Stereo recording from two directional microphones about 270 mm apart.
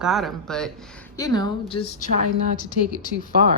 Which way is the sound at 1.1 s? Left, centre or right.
Centre.